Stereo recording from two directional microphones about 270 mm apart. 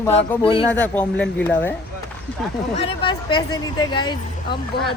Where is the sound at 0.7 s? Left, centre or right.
Centre.